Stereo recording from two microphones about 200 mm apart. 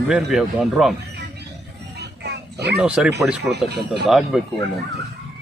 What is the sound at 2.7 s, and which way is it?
Speech, 5° right (ahead or behind).